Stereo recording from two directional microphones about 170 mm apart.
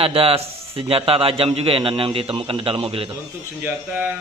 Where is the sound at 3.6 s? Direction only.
10° right (ahead or behind).